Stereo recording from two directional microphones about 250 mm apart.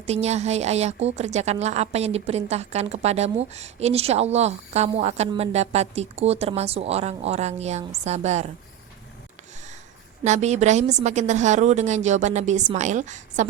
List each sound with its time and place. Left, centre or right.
0.0 s a woman's voice: right
10.2 s a woman's voice: right